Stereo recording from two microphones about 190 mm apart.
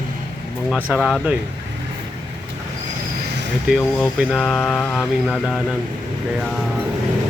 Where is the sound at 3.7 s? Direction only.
Centre (ahead or behind).